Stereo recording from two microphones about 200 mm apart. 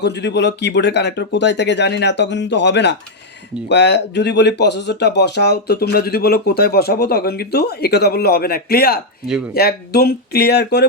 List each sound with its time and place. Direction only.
0.0 s speech: 60° left (ahead or behind)